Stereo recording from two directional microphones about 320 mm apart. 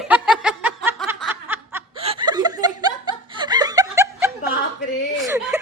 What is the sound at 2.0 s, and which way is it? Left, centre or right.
Chuckle, centre.